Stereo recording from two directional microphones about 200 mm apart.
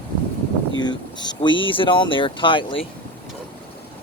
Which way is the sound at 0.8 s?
20° left (ahead or behind).